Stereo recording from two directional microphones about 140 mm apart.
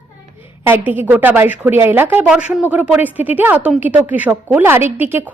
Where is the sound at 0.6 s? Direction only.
15° right (ahead or behind).